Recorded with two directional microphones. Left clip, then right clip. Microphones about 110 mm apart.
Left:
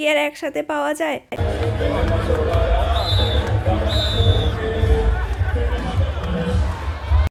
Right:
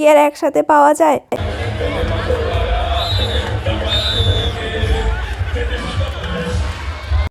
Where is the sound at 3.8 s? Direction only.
60° right (ahead or behind).